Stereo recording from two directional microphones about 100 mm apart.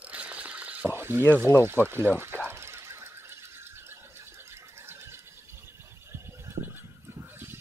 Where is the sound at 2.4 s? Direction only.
25° right (ahead or behind).